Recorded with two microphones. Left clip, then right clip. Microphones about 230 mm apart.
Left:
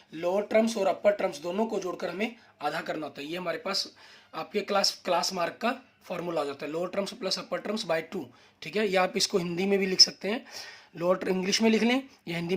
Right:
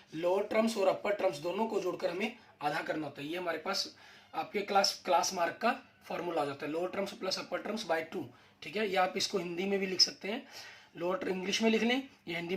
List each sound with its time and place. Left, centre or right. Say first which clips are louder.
0.2 s speech: left 5 dB; left